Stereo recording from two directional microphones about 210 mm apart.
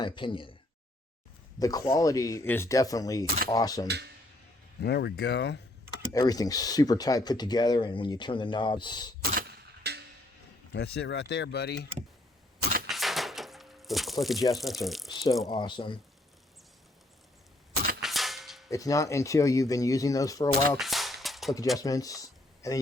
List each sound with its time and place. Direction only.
0.0 s speech: 25° left (ahead or behind)
1.5 s speech: 15° left (ahead or behind)
3.8 s speech: 50° right (ahead or behind)
4.8 s speech: 50° left (ahead or behind)
6.1 s speech: 15° left (ahead or behind)
9.3 s a sound: 50° right (ahead or behind)
10.7 s speech: 50° left (ahead or behind)
12.9 s a sound: centre (ahead or behind)
14.5 s speech: centre (ahead or behind)
15.1 s speech: 20° left (ahead or behind)
18.0 s a sound: centre (ahead or behind)
18.7 s speech: 15° left (ahead or behind)
20.7 s a sound: centre (ahead or behind)
21.8 s speech: 15° left (ahead or behind)